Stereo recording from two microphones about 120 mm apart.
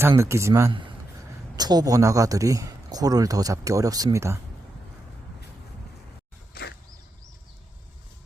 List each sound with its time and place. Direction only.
0.2 s speech: 25° right (ahead or behind)